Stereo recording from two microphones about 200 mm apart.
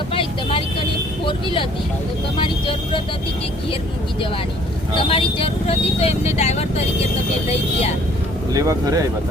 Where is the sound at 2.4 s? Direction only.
25° left (ahead or behind).